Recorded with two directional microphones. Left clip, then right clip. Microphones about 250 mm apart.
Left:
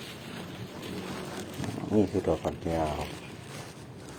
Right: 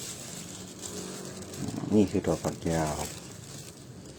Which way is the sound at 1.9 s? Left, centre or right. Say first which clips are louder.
Even; right.